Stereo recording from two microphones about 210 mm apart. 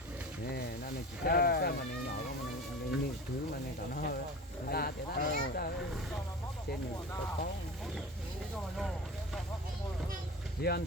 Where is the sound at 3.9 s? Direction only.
45° left (ahead or behind).